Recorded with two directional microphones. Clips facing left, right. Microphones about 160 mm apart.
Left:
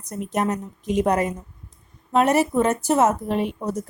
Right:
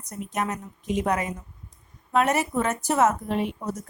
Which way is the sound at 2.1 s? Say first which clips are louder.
Left 4 dB; 35° left (ahead or behind).